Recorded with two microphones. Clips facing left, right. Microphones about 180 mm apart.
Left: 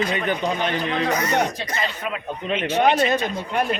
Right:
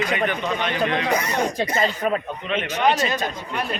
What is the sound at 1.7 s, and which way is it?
Speech, 40° right (ahead or behind).